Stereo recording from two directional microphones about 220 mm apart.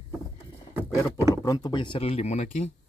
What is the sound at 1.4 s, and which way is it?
Speech, 15° left (ahead or behind).